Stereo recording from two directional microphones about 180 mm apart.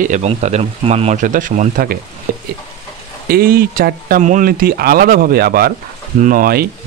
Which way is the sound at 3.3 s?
55° right (ahead or behind).